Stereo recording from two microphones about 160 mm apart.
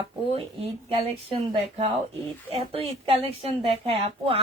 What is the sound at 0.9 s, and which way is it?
Speech, 35° right (ahead or behind).